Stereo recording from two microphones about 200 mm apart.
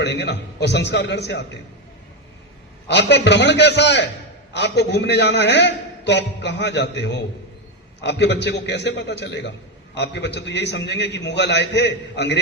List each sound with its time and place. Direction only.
0.0 s a man's voice: 60° left (ahead or behind)
2.8 s a man's voice: 60° left (ahead or behind)